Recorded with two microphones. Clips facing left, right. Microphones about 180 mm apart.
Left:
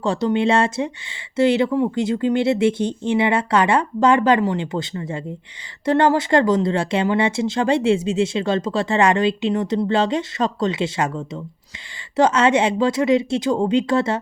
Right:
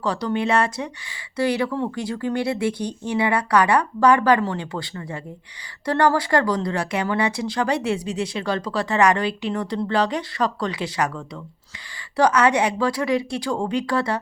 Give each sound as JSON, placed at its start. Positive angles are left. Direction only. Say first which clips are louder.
{"t": 0.0, "sound": "speech", "louder": "left 4 dB", "side_deg": 25}